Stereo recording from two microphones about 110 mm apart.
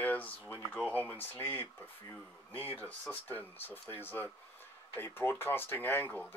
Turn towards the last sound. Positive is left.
turn(degrees=20)  # may be behind; listen again after turning